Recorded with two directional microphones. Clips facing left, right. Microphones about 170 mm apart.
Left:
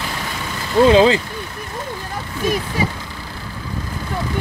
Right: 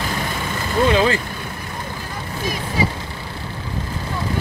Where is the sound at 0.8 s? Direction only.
25° left (ahead or behind).